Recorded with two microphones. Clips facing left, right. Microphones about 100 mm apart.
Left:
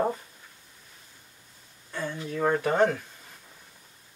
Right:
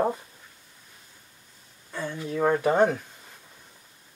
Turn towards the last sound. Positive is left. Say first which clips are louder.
# right 2 dB
turn(degrees=-10)  # may be behind; listen again after turning